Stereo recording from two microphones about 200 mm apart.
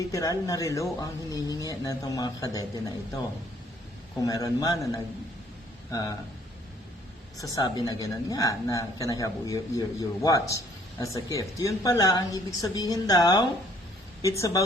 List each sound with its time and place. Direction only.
0.1 s speech: 15° left (ahead or behind)
4.2 s speech: 15° left (ahead or behind)
7.3 s speech: 15° left (ahead or behind)